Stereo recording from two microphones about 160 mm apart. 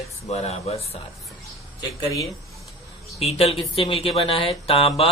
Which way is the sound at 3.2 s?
40° left (ahead or behind).